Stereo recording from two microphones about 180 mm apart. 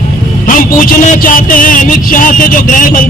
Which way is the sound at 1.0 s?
50° left (ahead or behind).